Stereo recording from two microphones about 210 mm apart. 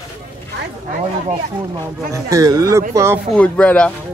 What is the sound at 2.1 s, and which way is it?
Speech, 15° right (ahead or behind).